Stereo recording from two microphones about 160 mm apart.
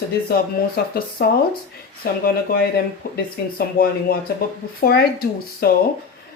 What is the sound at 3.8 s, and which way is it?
Speech, 65° left (ahead or behind).